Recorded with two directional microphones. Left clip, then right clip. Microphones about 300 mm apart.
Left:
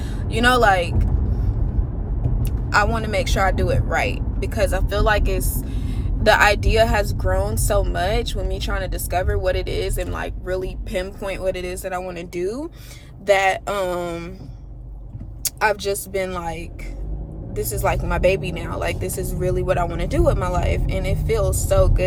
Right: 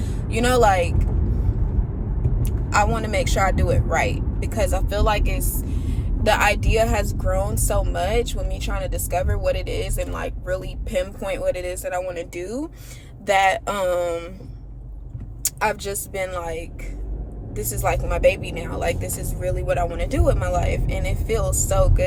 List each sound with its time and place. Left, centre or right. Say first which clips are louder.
0.1 s speech: left 3 dB; centre
2.4 s speech: left 1 dB; centre
15.4 s speech: left 3 dB; centre